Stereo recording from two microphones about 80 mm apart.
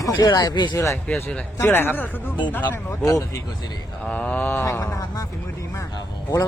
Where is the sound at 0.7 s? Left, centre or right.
Left.